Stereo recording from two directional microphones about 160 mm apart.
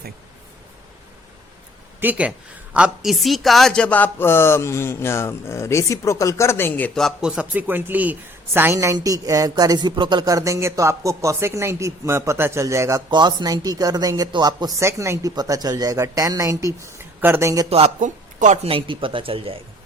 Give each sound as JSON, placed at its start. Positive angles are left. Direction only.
{"t": 2.0, "sound": "speech", "side_deg": -10}
{"t": 17.7, "sound": "speech", "side_deg": -40}
{"t": 18.0, "sound": "speech", "side_deg": -50}